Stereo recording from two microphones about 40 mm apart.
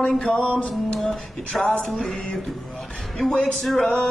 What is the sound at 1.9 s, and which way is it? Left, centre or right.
Speech, centre.